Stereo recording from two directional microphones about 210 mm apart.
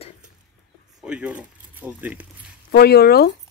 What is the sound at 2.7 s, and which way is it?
Speech, 50° left (ahead or behind).